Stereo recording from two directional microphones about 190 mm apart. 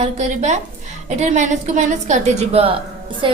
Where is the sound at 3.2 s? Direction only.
25° right (ahead or behind).